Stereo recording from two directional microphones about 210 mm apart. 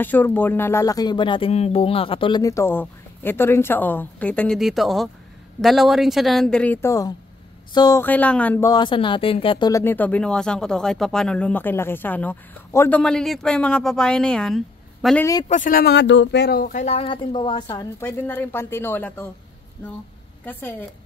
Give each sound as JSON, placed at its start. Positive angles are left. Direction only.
{"t": 0.0, "sound": "a woman's voice", "side_deg": 10}
{"t": 15.4, "sound": "speech", "side_deg": 40}
{"t": 17.6, "sound": "speech", "side_deg": 10}